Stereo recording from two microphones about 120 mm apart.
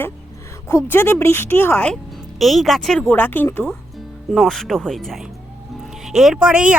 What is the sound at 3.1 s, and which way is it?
Speech, 15° left (ahead or behind).